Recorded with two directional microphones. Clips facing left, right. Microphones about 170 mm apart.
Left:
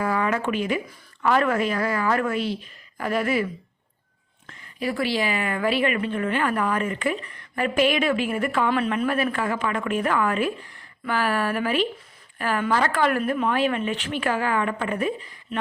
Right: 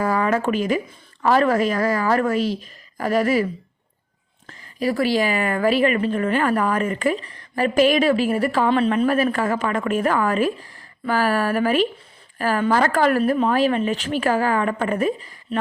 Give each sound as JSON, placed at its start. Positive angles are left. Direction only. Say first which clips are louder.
{"t": 0.0, "sound": "a woman's voice", "louder": "right 4 dB", "side_deg": -40}
{"t": 4.4, "sound": "a woman's voice", "louder": "right 5 dB", "side_deg": -35}